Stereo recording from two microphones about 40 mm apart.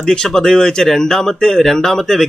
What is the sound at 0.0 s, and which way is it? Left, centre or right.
Speech, centre.